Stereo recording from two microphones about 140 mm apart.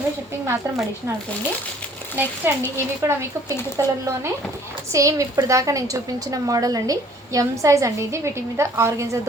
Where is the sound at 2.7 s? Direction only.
20° right (ahead or behind).